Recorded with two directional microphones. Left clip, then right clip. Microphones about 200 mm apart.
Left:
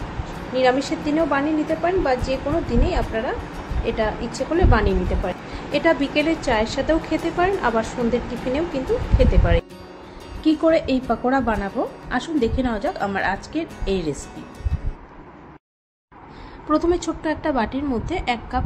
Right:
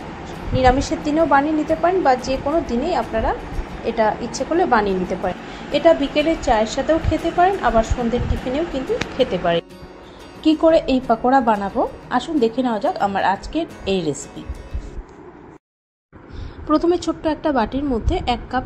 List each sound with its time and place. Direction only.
0.3 s a woman's voice: 5° right (ahead or behind)
10.4 s a woman's voice: 5° right (ahead or behind)
16.7 s a woman's voice: 10° right (ahead or behind)